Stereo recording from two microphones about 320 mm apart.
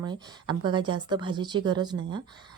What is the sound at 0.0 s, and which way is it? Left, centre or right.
Speech, centre.